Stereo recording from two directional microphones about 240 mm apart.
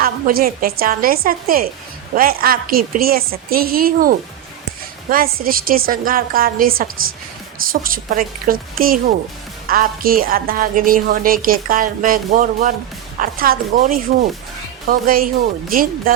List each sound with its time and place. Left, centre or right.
0.0 s a woman's voice: right